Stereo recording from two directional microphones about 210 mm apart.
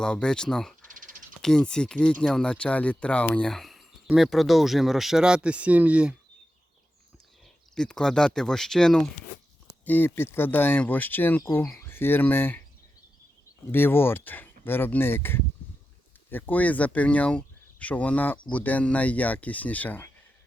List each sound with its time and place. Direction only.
0.0 s speech: 5° left (ahead or behind)
0.9 s typing: 40° right (ahead or behind)
1.4 s speech: centre (ahead or behind)
7.8 s speech: 5° left (ahead or behind)
13.7 s speech: 10° left (ahead or behind)